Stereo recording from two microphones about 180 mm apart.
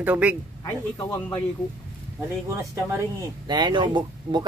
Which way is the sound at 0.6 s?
20° left (ahead or behind).